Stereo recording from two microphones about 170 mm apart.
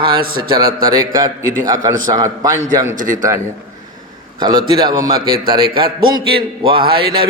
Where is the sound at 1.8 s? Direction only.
20° right (ahead or behind).